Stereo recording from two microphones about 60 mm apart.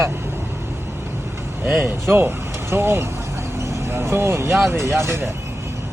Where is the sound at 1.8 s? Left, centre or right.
Right.